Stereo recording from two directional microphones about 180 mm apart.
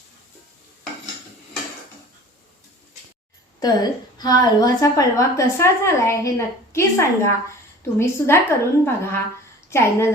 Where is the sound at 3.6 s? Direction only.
20° left (ahead or behind).